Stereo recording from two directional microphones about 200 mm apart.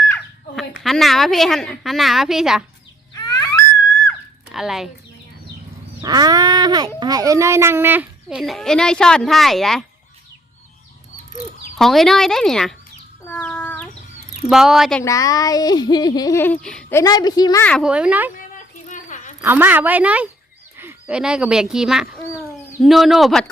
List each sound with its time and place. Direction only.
0.8 s a woman's voice: centre (ahead or behind)
3.2 s a sound: 20° left (ahead or behind)
4.5 s a woman's voice: centre (ahead or behind)
6.0 s speech: 20° right (ahead or behind); by 9.8 s centre (ahead or behind)
11.8 s a woman's voice: centre (ahead or behind)
13.2 s chicken: 10° left (ahead or behind)
14.4 s a woman's voice: centre (ahead or behind)
15.0 s speech: 15° left (ahead or behind)
17.0 s speech: 20° left (ahead or behind)
17.8 s a woman's voice: 5° right (ahead or behind)
18.3 s a sound: 40° left (ahead or behind)
19.4 s a woman's voice: 10° right (ahead or behind)